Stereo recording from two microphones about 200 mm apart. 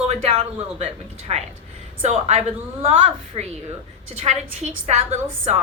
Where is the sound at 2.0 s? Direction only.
35° right (ahead or behind).